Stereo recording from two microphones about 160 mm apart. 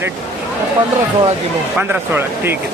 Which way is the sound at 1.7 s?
10° right (ahead or behind).